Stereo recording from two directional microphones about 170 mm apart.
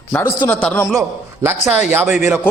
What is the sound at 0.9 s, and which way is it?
Speech, 15° right (ahead or behind).